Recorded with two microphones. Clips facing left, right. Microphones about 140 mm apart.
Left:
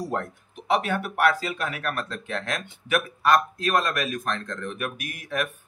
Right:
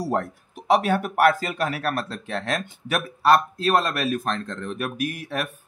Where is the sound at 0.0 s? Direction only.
40° right (ahead or behind).